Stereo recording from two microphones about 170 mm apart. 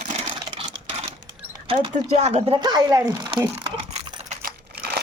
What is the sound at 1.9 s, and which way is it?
Speech, 40° right (ahead or behind).